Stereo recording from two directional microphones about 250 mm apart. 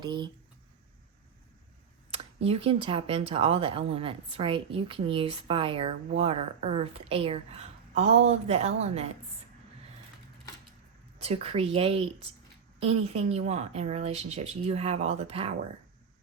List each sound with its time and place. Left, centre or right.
0.0 s speech: centre
2.1 s speech: right
11.2 s speech: right